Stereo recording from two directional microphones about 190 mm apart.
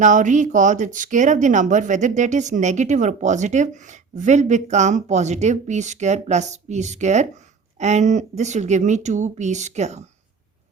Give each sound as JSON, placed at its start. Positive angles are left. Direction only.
{"t": 0.0, "sound": "speech", "side_deg": -40}